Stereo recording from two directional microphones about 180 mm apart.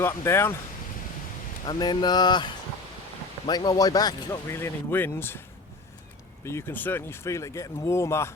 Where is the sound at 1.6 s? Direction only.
25° left (ahead or behind).